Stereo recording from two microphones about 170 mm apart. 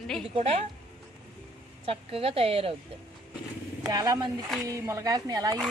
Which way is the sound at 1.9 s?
35° right (ahead or behind).